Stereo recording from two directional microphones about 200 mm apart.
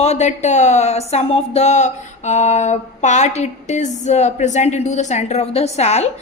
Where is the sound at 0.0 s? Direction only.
35° left (ahead or behind).